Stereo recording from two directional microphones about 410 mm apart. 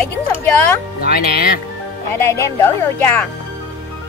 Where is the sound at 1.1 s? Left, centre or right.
Left.